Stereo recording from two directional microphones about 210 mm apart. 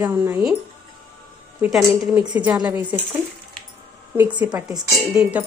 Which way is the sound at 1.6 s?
5° right (ahead or behind).